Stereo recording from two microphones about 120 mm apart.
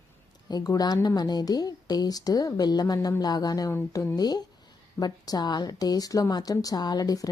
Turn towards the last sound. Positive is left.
turn(degrees=30)  # may be behind; listen again after turning